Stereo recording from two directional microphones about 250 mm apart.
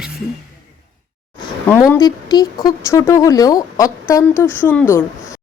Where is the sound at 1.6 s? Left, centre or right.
Centre.